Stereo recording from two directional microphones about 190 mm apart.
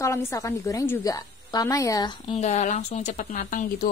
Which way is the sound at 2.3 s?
40° left (ahead or behind).